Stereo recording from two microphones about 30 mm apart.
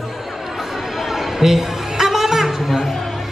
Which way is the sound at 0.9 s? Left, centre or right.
Centre.